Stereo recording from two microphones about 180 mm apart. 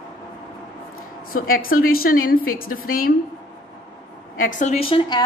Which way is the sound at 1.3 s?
50° left (ahead or behind).